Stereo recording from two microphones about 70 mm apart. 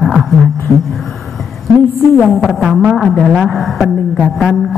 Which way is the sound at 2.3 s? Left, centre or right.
Centre.